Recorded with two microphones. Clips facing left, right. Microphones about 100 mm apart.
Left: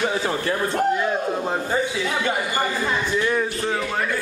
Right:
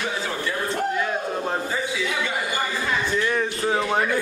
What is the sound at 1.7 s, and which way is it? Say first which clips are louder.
Speech: left 3 dB; 40° left (ahead or behind).